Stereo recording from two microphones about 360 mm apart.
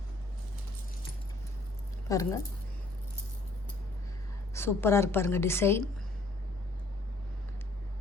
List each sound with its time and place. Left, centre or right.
2.0 s a woman's voice: centre
4.5 s a woman's voice: centre